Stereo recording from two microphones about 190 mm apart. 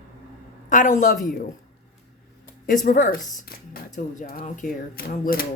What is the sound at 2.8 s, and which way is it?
Speech, 45° left (ahead or behind).